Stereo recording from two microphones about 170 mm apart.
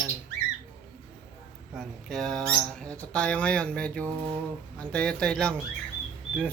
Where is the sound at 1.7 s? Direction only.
Centre (ahead or behind).